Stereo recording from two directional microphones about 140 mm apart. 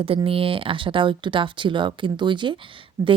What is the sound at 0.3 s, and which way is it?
Speech, 40° right (ahead or behind).